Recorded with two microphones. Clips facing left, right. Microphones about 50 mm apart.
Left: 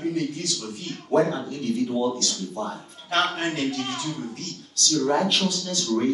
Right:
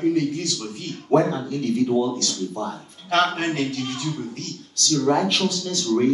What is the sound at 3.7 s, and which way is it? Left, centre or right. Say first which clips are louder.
Speech: right 1 dB; left.